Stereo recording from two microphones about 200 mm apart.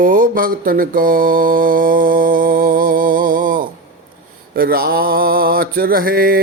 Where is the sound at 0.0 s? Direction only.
45° right (ahead or behind).